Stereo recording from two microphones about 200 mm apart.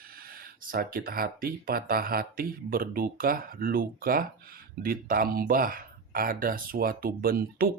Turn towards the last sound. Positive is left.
turn(degrees=-45)  # may be behind; listen again after turning